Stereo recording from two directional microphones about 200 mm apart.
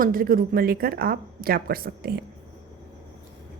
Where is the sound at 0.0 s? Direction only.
45° right (ahead or behind).